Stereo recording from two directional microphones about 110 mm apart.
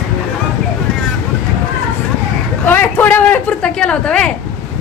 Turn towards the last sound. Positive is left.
turn(degrees=10)  # may be behind; listen again after turning